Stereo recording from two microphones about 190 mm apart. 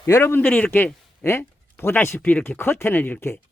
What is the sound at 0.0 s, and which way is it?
Speech, 10° left (ahead or behind).